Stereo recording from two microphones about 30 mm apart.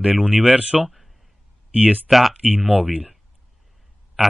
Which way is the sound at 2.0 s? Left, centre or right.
Centre.